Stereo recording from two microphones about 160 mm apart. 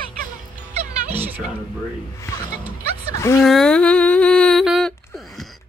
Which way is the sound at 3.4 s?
5° left (ahead or behind).